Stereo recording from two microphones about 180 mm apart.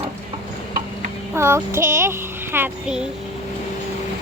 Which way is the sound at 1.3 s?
15° right (ahead or behind).